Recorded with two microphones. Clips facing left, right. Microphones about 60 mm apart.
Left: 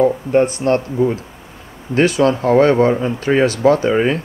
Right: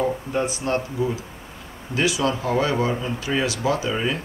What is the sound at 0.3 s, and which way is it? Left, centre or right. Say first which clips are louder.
Speech: left 9 dB; left.